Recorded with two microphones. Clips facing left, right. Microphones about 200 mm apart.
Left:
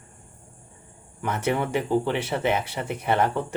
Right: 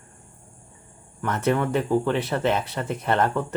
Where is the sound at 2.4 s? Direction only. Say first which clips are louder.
Right 1 dB; 10° left (ahead or behind).